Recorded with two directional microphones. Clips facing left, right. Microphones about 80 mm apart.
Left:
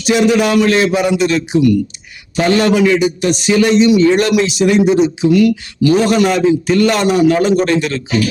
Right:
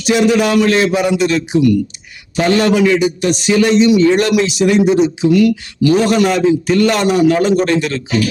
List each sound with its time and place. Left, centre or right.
0.0 s a man's voice: centre